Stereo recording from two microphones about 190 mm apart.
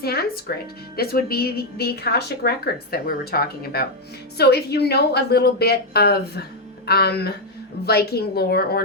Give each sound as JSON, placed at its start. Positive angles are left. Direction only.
{"t": 0.0, "sound": "speech", "side_deg": 55}